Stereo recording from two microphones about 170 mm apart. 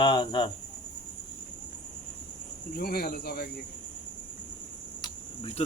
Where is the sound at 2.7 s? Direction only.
65° left (ahead or behind).